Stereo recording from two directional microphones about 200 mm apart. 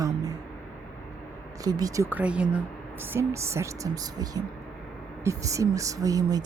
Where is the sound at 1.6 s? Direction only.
20° right (ahead or behind).